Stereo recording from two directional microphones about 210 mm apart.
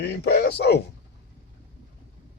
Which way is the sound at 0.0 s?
50° left (ahead or behind).